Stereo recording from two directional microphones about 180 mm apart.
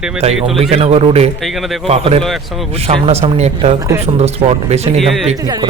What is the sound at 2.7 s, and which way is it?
A man's voice, 35° right (ahead or behind).